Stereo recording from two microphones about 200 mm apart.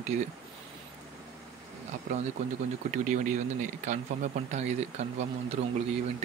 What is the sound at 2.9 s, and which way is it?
Speech, 40° right (ahead or behind).